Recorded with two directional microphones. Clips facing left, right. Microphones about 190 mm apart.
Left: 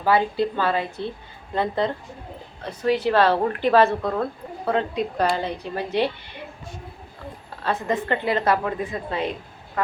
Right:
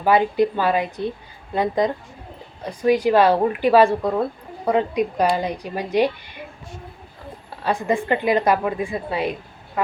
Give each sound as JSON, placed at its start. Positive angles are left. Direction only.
{"t": 0.0, "sound": "a woman's voice", "side_deg": -15}
{"t": 7.6, "sound": "a woman's voice", "side_deg": -10}